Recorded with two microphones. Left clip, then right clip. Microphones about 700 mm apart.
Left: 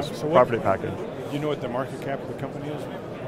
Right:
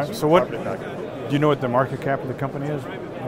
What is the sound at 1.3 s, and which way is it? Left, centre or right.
Speech, right.